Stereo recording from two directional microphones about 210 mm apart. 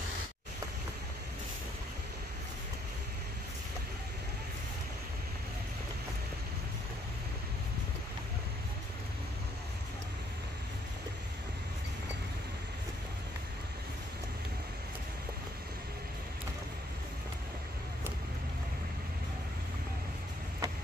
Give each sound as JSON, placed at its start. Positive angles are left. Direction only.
{"t": 20.6, "sound": "vehicle", "side_deg": -15}